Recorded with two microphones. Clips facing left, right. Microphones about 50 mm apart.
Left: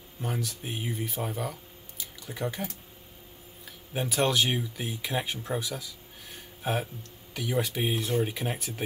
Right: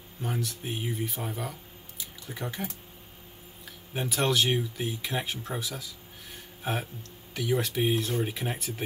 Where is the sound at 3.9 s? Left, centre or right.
Centre.